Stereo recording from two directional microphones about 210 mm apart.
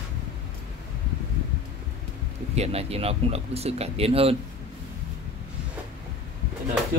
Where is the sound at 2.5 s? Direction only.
30° right (ahead or behind).